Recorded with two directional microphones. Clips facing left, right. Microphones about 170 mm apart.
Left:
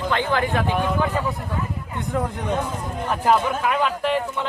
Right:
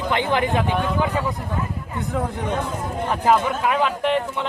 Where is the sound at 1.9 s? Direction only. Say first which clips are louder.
Even; centre (ahead or behind).